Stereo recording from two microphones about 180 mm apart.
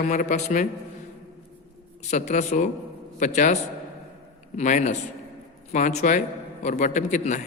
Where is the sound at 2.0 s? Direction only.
40° left (ahead or behind).